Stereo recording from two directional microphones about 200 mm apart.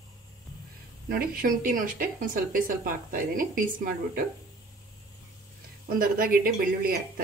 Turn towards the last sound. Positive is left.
turn(degrees=-45)  # may be behind; listen again after turning